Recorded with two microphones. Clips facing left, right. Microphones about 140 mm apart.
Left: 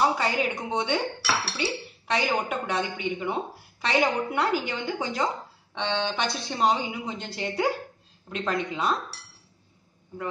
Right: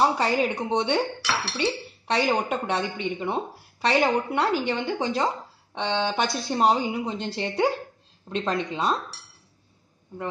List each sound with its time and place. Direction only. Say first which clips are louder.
0.0 s a woman's voice: right 2 dB; 35° right (ahead or behind)
1.2 s dishes: right 1 dB; 5° left (ahead or behind)
2.0 s a woman's voice: right 3 dB; 35° right (ahead or behind)
6.0 s a woman's voice: right 3 dB; 45° right (ahead or behind)